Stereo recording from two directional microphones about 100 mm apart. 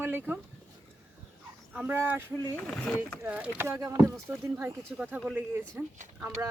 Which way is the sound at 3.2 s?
15° right (ahead or behind).